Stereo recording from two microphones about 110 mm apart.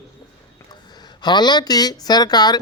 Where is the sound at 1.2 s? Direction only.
40° left (ahead or behind).